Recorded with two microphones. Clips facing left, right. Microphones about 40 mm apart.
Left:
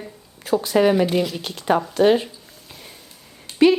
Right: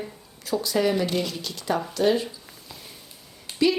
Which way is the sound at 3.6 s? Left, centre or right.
Left.